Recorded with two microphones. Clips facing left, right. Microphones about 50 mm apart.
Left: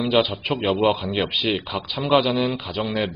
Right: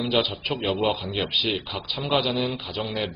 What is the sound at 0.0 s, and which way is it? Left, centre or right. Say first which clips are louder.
A man's voice: left 4 dB; left.